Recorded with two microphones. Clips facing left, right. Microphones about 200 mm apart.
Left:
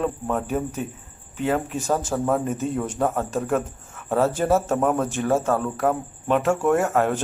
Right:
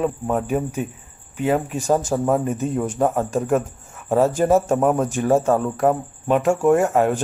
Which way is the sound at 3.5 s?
Centre (ahead or behind).